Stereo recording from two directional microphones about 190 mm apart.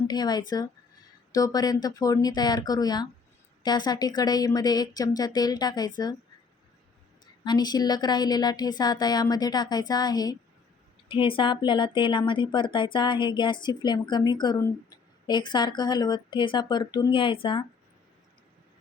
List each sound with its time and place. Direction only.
0.1 s speech: 20° left (ahead or behind)
7.4 s speech: 20° left (ahead or behind)